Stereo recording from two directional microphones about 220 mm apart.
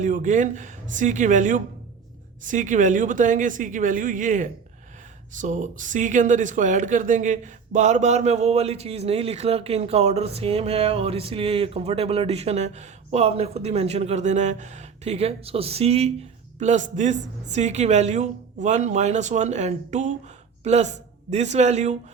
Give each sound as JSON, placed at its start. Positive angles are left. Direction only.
{"t": 0.0, "sound": "a woman's voice", "side_deg": -35}